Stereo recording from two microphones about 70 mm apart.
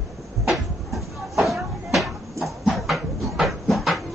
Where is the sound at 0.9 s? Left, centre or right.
Centre.